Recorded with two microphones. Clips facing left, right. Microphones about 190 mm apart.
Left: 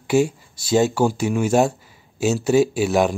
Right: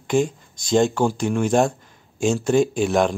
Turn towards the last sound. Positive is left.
turn(degrees=5)  # may be behind; listen again after turning